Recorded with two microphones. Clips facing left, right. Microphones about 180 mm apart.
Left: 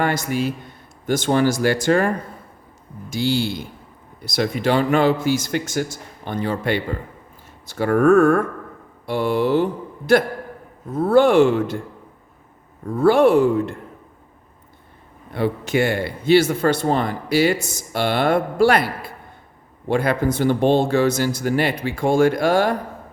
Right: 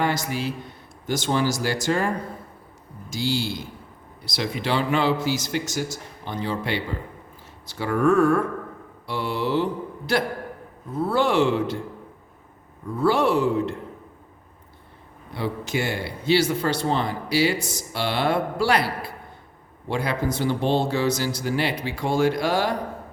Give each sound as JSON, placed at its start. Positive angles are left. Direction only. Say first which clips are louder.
{"t": 0.0, "sound": "speech", "louder": "left 4 dB", "side_deg": 50}
{"t": 13.0, "sound": "speech", "louder": "left 6 dB", "side_deg": 50}
{"t": 15.3, "sound": "speech", "louder": "left 6 dB", "side_deg": 55}